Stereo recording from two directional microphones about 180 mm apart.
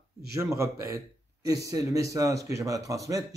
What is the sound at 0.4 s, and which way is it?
A man's voice, 15° right (ahead or behind).